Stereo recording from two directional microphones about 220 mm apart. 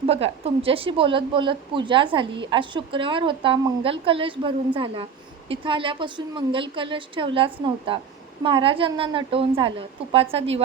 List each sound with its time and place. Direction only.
0.0 s a woman's voice: 25° right (ahead or behind)